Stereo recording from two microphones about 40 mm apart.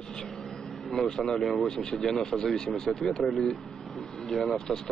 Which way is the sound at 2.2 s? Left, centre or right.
Centre.